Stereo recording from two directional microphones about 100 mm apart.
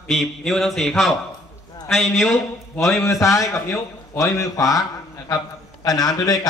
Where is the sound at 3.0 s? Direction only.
30° left (ahead or behind).